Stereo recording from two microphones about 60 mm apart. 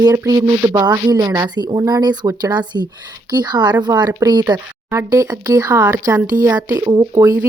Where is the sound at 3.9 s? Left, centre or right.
Right.